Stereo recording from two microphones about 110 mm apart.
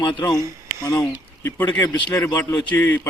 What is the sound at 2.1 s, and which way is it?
Speech, 30° left (ahead or behind).